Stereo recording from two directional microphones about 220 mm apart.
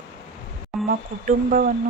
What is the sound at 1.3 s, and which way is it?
Speech, 40° right (ahead or behind).